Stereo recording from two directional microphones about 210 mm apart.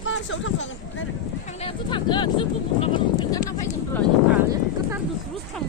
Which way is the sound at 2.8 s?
20° left (ahead or behind).